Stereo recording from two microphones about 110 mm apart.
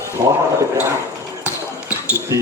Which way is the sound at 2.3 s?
30° right (ahead or behind).